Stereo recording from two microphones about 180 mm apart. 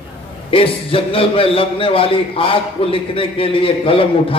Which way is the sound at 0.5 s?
30° left (ahead or behind).